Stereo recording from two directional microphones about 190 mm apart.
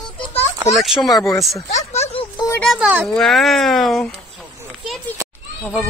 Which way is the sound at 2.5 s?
5° left (ahead or behind).